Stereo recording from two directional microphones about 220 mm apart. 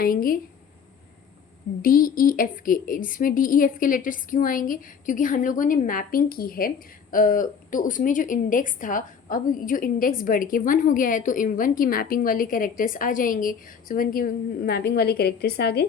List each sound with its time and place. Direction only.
0.0 s a woman's voice: 40° left (ahead or behind)
1.8 s a woman's voice: 40° left (ahead or behind)